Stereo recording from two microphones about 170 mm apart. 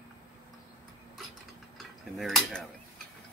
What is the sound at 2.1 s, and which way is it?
Speech, centre (ahead or behind).